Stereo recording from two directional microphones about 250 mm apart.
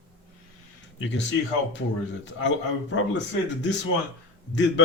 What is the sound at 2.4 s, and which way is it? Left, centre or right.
Speech, left.